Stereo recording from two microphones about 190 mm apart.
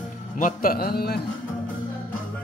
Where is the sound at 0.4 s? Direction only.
45° left (ahead or behind).